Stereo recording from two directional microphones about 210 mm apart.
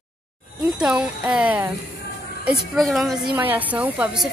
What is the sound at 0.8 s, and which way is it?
Music, 5° right (ahead or behind).